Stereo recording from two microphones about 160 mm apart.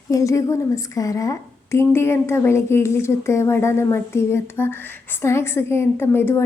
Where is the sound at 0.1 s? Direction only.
20° left (ahead or behind).